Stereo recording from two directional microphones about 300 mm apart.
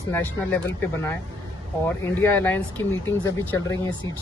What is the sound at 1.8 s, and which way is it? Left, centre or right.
Speech, centre.